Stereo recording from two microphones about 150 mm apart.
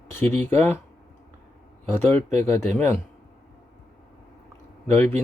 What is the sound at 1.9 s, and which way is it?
Speech, 15° left (ahead or behind).